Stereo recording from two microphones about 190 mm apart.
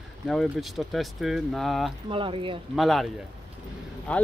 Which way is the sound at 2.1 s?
30° right (ahead or behind).